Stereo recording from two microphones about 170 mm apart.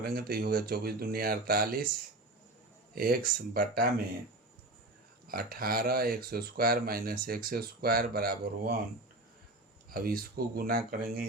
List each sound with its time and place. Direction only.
0.0 s speech: 60° right (ahead or behind)
2.9 s speech: 60° right (ahead or behind)
5.3 s speech: 60° right (ahead or behind)
9.9 s speech: 60° right (ahead or behind)